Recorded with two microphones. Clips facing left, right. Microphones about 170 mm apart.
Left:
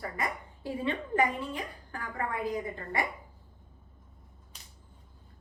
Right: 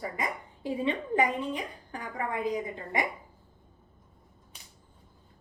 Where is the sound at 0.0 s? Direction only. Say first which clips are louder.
Right 1 dB; 20° right (ahead or behind).